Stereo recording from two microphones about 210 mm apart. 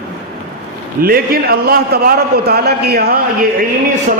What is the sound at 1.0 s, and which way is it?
A man's voice, 45° right (ahead or behind).